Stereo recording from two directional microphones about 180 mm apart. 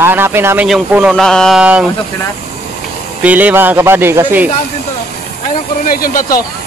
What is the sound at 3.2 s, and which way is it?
Speech, 10° right (ahead or behind).